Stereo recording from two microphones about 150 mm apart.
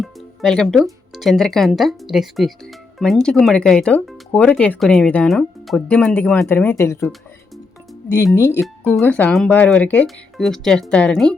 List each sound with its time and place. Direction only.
0.0 s music: 5° left (ahead or behind)
1.1 s speech: centre (ahead or behind); by 7.1 s 15° left (ahead or behind)
8.4 s speech: 20° left (ahead or behind)
8.6 s speech: 5° left (ahead or behind)